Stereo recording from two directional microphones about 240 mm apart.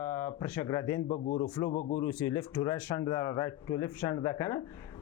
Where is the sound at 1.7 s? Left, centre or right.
Left.